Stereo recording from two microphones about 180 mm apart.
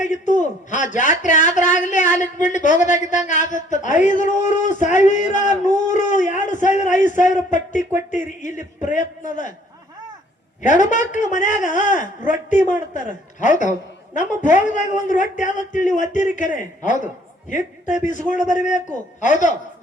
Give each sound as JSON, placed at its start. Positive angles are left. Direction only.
{"t": 0.0, "sound": "a man's voice", "side_deg": 45}
{"t": 10.6, "sound": "a man's voice", "side_deg": 45}